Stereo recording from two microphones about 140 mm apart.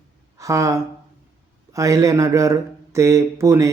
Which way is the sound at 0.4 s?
20° right (ahead or behind).